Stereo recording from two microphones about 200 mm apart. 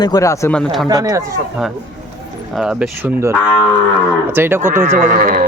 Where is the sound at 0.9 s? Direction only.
15° right (ahead or behind).